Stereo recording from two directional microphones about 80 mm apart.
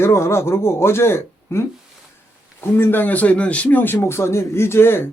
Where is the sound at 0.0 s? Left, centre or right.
Left.